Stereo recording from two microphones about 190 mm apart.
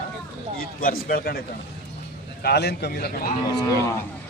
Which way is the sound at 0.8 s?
50° left (ahead or behind).